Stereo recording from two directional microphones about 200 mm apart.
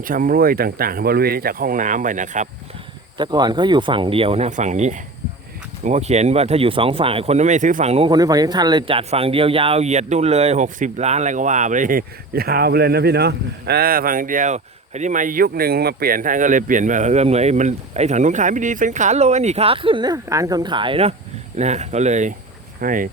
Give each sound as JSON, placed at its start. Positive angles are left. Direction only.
{"t": 0.0, "sound": "speech", "side_deg": -45}
{"t": 3.2, "sound": "speech", "side_deg": -20}